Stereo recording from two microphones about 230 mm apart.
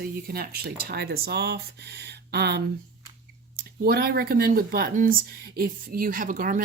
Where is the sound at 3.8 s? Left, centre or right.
Right.